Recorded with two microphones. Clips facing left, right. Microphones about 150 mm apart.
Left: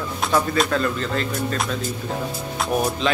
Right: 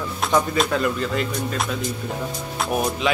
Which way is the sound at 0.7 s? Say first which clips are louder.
Even; 10° right (ahead or behind).